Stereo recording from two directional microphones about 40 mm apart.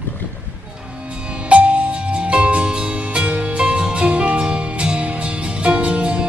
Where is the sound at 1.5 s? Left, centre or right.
Right.